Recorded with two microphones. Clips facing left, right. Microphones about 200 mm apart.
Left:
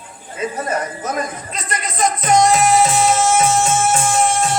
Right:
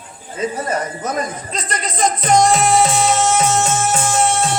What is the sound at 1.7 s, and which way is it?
Music, 30° right (ahead or behind).